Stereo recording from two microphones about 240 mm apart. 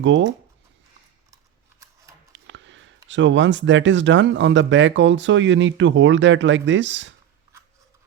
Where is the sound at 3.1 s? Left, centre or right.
Right.